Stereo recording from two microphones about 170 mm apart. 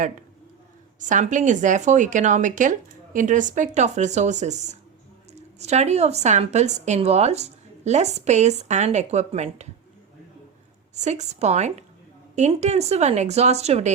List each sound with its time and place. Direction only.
0.9 s a woman's voice: 45° right (ahead or behind)
10.9 s a woman's voice: 45° right (ahead or behind)